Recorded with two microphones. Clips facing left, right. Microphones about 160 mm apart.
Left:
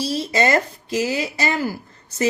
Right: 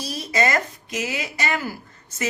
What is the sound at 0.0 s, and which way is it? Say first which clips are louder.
Speech: left 3 dB; 30° left (ahead or behind).